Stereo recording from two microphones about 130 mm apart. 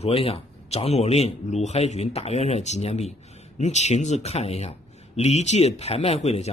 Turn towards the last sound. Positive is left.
turn(degrees=55)  # may be behind; listen again after turning